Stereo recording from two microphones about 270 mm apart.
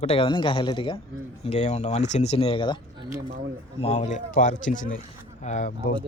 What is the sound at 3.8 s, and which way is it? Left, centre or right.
Speech, left.